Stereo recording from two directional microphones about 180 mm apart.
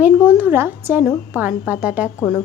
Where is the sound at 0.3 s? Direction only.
10° right (ahead or behind).